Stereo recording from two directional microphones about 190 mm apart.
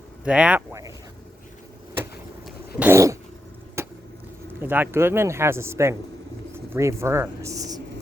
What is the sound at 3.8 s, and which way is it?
Vehicle, 15° right (ahead or behind).